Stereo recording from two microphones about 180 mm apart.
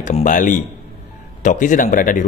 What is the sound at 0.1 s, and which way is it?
Speech, 45° left (ahead or behind).